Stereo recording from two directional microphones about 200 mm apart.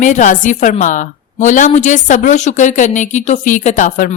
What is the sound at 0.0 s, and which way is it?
A woman's voice, 40° left (ahead or behind).